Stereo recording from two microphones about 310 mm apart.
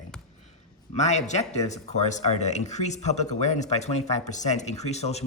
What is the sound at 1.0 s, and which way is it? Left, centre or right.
Speech, left.